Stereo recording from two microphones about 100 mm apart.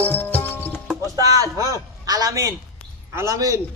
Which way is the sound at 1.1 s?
35° right (ahead or behind).